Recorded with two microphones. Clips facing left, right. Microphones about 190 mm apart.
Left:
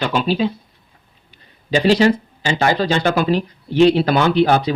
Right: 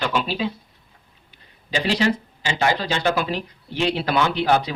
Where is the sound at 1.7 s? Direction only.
35° left (ahead or behind).